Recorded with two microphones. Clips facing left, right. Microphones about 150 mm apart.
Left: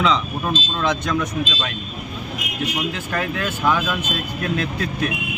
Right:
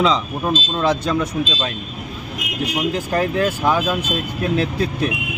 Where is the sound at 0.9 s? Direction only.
30° right (ahead or behind).